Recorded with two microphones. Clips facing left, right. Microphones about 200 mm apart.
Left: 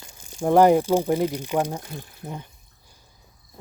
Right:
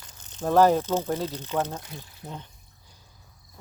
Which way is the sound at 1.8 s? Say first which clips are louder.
Left 5 dB; 50° left (ahead or behind).